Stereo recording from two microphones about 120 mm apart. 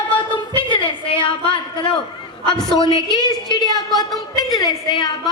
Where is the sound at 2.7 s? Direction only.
40° left (ahead or behind).